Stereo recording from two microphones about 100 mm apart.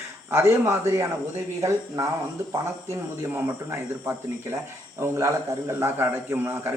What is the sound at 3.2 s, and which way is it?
A man's voice, 25° right (ahead or behind).